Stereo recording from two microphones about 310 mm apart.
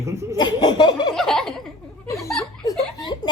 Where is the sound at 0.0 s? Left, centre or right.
Centre.